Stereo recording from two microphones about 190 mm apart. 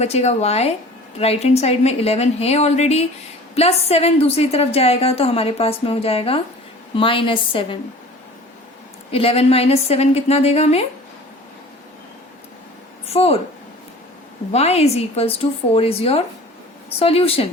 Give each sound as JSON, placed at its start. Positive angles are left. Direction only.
{"t": 0.0, "sound": "a woman's voice", "side_deg": 35}
{"t": 9.1, "sound": "a woman's voice", "side_deg": 30}
{"t": 13.1, "sound": "a woman's voice", "side_deg": 30}
{"t": 14.5, "sound": "a woman's voice", "side_deg": 35}